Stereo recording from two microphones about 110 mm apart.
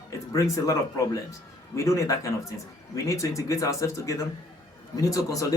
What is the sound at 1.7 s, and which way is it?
Speech, 30° left (ahead or behind).